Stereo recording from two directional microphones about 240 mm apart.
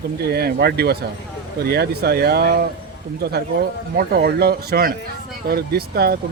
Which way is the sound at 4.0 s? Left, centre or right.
Right.